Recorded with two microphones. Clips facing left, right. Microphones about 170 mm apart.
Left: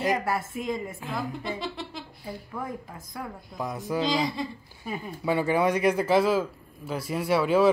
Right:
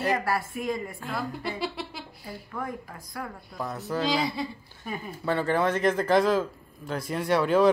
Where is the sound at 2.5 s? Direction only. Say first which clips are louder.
Right 2 dB; 20° left (ahead or behind).